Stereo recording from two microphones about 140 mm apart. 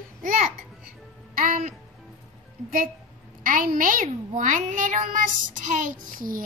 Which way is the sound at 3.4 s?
80° right.